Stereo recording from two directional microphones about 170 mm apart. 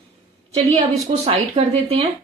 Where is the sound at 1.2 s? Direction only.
35° right (ahead or behind).